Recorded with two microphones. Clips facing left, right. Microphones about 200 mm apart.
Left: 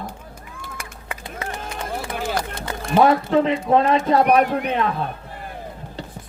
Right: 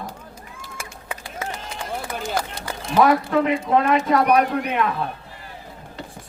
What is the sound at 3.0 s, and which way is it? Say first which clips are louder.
A man's voice: left 1 dB; 30° left (ahead or behind).